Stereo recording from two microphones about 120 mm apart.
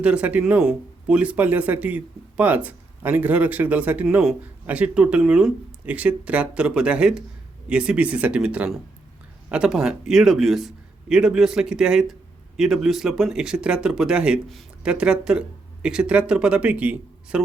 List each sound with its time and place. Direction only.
0.0 s a man's voice: 10° right (ahead or behind)